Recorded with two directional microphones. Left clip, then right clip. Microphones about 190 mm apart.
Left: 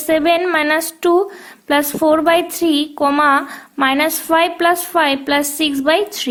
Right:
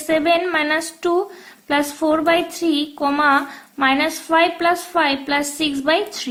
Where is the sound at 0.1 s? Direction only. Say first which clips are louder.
Left 3 dB; 50° left (ahead or behind).